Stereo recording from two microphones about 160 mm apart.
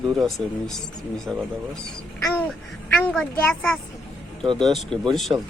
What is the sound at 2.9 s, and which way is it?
A woman's voice, centre (ahead or behind).